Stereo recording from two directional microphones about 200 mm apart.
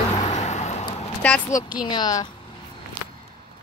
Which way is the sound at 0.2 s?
35° left (ahead or behind).